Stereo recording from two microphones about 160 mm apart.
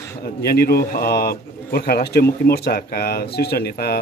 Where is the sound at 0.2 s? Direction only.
75° left (ahead or behind).